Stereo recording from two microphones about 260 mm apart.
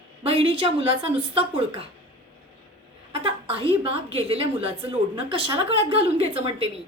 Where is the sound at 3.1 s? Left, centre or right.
Right.